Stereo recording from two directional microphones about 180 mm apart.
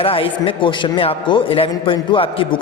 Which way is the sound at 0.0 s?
30° left (ahead or behind).